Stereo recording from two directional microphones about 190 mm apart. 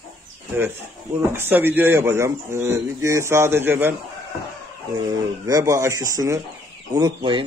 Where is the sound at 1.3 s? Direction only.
10° right (ahead or behind).